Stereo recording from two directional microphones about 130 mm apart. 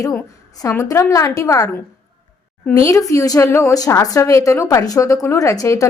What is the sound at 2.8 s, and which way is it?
A woman's voice, 25° left (ahead or behind).